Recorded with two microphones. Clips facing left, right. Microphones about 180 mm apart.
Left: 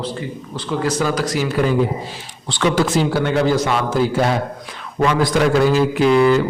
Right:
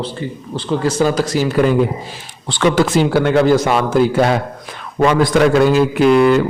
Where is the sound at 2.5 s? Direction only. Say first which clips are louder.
Right 3 dB; 60° right (ahead or behind).